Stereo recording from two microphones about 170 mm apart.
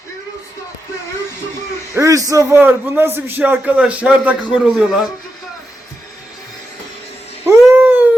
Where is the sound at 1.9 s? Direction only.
20° right (ahead or behind); by 5.1 s 5° right (ahead or behind).